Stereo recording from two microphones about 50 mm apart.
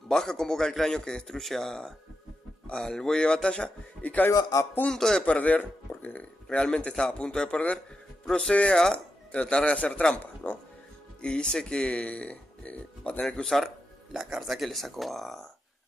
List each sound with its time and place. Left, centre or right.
0.1 s a man's voice: centre
4.0 s speech: left
4.9 s a man's voice: centre
5.2 s speech: left
6.5 s a man's voice: left
10.1 s music: left
11.1 s speech: centre
14.1 s speech: centre